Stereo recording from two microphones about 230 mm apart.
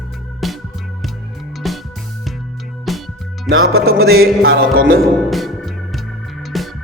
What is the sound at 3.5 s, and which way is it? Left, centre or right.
Music, right.